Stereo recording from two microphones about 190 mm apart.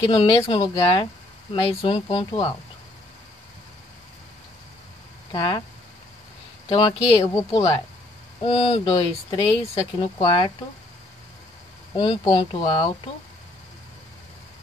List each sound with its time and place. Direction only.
0.1 s speech: 25° left (ahead or behind)
5.3 s speech: 20° left (ahead or behind)
6.7 s speech: 25° left (ahead or behind)
12.0 s speech: 25° left (ahead or behind)